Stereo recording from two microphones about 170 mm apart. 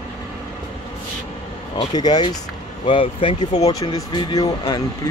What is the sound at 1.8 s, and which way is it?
Speech, 25° left (ahead or behind).